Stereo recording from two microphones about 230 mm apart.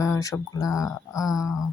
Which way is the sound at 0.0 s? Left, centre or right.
Centre.